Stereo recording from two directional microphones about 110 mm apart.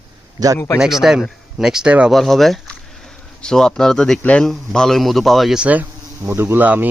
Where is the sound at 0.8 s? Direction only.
5° right (ahead or behind).